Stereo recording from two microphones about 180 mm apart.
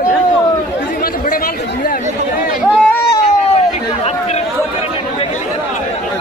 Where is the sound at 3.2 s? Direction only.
35° left (ahead or behind).